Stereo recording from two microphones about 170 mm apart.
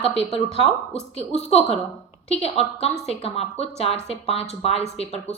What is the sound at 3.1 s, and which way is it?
Speech, 35° left (ahead or behind).